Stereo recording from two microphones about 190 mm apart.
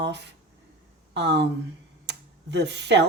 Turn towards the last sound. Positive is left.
turn(degrees=-65)  # may be behind; listen again after turning